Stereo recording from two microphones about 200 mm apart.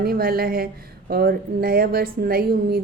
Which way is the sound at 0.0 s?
50° right (ahead or behind).